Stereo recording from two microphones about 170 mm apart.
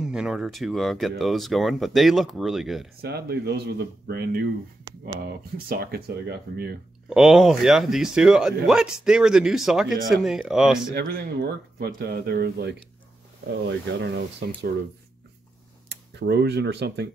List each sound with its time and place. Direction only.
0.0 s speech: 5° right (ahead or behind)
3.0 s speech: 70° right (ahead or behind)
7.1 s speech: centre (ahead or behind)
11.0 s speech: 70° right (ahead or behind)
13.7 s speech: 90° right
15.9 s speech: 80° right